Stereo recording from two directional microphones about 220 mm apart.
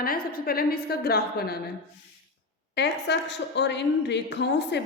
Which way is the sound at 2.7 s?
50° left (ahead or behind).